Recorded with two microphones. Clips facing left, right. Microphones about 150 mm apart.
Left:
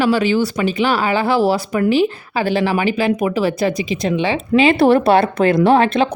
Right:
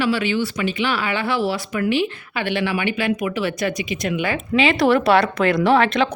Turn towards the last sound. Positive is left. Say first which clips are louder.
# left 3 dB
turn(degrees=35)  # may be behind; listen again after turning